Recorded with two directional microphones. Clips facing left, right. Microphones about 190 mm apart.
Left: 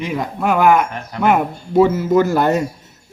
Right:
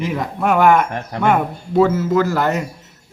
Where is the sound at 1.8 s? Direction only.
15° left (ahead or behind).